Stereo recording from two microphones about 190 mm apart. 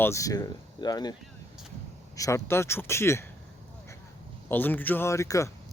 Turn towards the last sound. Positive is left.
turn(degrees=15)  # may be behind; listen again after turning